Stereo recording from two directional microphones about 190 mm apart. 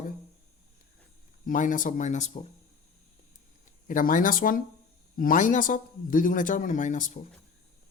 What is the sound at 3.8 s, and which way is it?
Speech, 45° left (ahead or behind).